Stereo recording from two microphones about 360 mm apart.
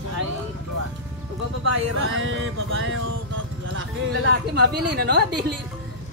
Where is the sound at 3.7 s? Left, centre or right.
Right.